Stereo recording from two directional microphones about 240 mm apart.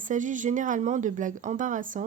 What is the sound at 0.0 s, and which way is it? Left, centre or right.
A woman's voice, right.